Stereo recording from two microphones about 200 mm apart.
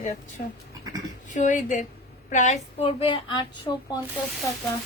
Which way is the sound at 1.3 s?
40° left (ahead or behind).